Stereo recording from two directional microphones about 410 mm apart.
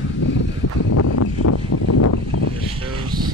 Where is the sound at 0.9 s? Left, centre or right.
Left.